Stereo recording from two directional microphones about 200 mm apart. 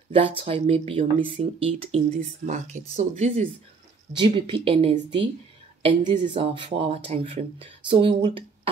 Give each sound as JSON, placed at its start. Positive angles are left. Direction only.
{"t": 0.1, "sound": "speech", "side_deg": -30}
{"t": 4.1, "sound": "speech", "side_deg": -25}